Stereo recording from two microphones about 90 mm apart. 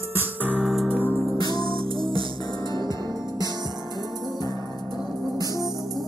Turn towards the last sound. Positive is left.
turn(degrees=-45)  # may be behind; listen again after turning